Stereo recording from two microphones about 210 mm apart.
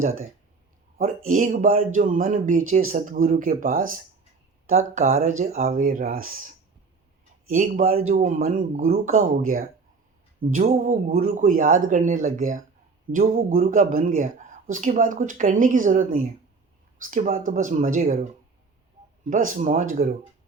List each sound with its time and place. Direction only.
1.3 s speech: 40° right (ahead or behind)
19.3 s speech: 40° right (ahead or behind)